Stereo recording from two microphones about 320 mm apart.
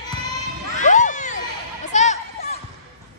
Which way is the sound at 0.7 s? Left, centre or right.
Left.